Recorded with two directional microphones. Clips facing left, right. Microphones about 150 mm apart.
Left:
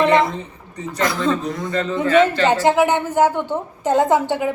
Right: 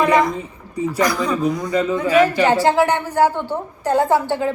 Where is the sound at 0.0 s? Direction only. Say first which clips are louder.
Even; 25° left (ahead or behind).